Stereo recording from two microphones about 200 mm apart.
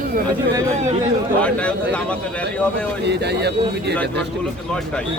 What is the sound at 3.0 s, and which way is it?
Speech, 55° right (ahead or behind).